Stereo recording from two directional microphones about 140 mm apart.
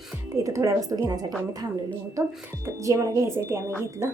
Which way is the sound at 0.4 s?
20° right (ahead or behind).